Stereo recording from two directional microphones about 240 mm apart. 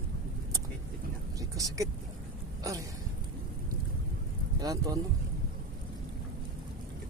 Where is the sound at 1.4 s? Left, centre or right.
Centre.